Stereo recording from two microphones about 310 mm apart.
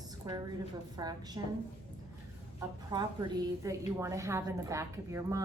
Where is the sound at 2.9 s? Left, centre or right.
Centre.